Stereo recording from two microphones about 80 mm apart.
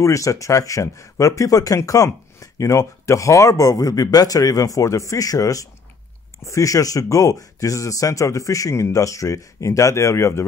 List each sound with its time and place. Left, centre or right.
0.0 s speech: left